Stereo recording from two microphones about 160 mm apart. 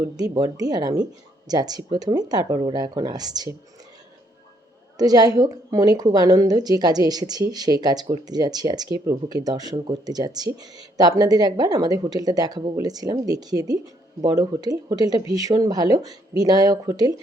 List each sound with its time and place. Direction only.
0.0 s a woman's voice: 20° right (ahead or behind)
4.9 s a woman's voice: 25° right (ahead or behind)